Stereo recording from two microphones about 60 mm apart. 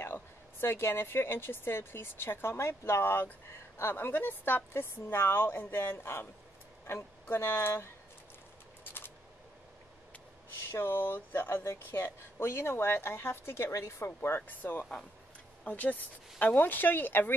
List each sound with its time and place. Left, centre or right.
0.0 s speech: left
10.7 s speech: left
13.7 s speech: left